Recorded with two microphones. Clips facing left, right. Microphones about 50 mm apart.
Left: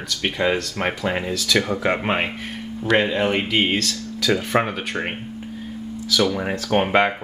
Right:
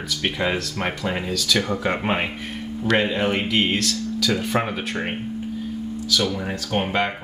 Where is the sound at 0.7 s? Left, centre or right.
Centre.